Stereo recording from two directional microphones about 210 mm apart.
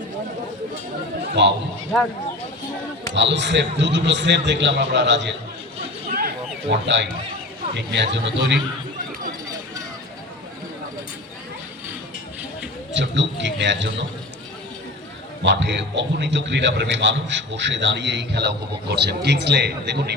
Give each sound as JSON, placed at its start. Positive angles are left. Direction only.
{"t": 1.4, "sound": "a man's voice", "side_deg": -55}
{"t": 3.2, "sound": "a man's voice", "side_deg": -55}
{"t": 6.1, "sound": "a sound", "side_deg": -45}
{"t": 7.7, "sound": "a man's voice", "side_deg": -55}
{"t": 12.9, "sound": "a man's voice", "side_deg": -60}
{"t": 15.4, "sound": "a man's voice", "side_deg": -55}